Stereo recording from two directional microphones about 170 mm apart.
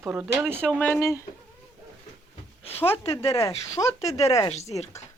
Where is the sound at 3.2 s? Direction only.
20° left (ahead or behind).